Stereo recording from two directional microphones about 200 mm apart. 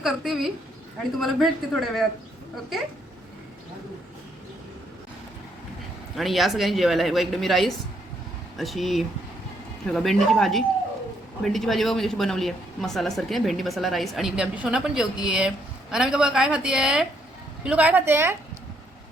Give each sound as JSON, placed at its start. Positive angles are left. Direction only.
{"t": 0.0, "sound": "a woman's voice", "side_deg": 0}
{"t": 6.1, "sound": "a woman's voice", "side_deg": 0}